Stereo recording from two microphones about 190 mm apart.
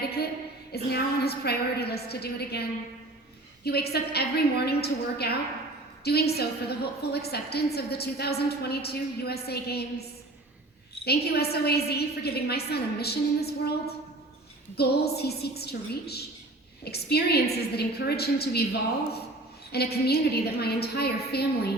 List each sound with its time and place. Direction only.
0.0 s a sound: 55° left (ahead or behind)
0.7 s a woman's voice: 55° left (ahead or behind)
11.0 s a woman's voice: 55° left (ahead or behind)